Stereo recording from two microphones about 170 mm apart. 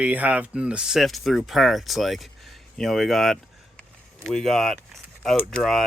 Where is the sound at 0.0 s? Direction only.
10° right (ahead or behind).